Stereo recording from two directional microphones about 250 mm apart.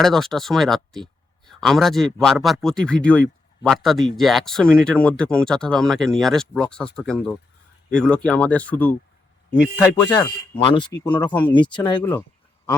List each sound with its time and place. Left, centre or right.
0.0 s speech: centre